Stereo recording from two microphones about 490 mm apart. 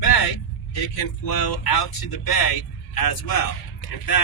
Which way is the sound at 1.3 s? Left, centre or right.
Left.